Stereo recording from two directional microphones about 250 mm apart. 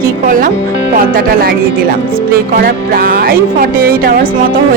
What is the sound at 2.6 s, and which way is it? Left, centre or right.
Speech, right.